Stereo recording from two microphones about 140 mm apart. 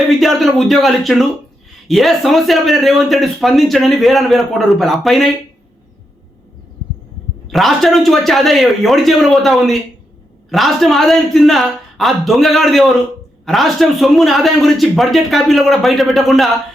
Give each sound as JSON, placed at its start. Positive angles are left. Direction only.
{"t": 0.1, "sound": "speech", "side_deg": 0}
{"t": 7.4, "sound": "speech", "side_deg": 0}